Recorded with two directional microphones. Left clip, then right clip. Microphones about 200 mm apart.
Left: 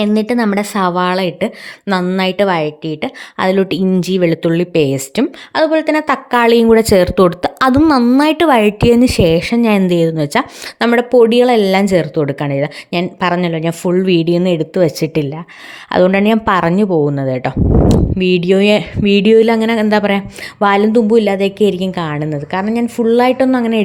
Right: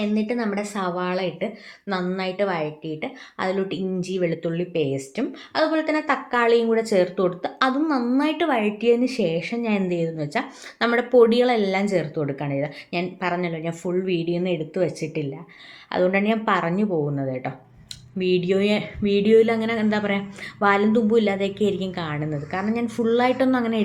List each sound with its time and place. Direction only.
0.0 s a woman's voice: 60° left (ahead or behind)
10.8 s a woman's voice: 40° left (ahead or behind)